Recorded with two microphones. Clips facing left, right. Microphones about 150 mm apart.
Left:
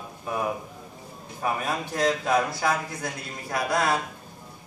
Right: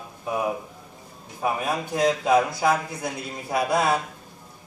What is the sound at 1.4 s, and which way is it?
A man's voice, 10° right (ahead or behind).